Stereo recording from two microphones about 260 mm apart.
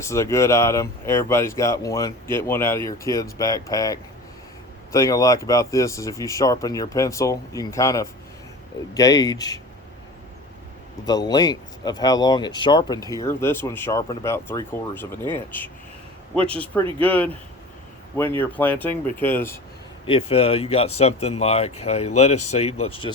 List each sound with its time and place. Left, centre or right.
0.0 s speech: centre
11.0 s speech: centre
17.0 s speech: centre
18.3 s speech: centre
20.1 s speech: left